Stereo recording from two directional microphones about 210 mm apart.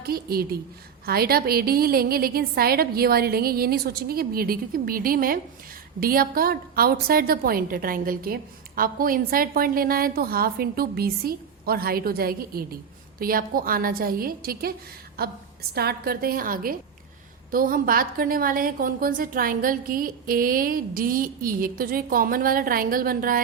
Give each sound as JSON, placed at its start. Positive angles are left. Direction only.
{"t": 0.0, "sound": "a woman's voice", "side_deg": -45}
{"t": 15.7, "sound": "a woman's voice", "side_deg": -50}